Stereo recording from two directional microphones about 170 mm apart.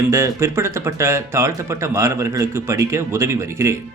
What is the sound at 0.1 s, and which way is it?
Speech, 15° right (ahead or behind).